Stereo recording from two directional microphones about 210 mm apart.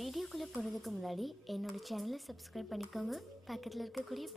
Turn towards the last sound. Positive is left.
turn(degrees=0)  # may be behind; listen again after turning